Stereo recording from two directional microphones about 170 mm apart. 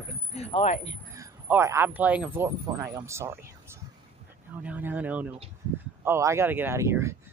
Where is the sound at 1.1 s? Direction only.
15° right (ahead or behind).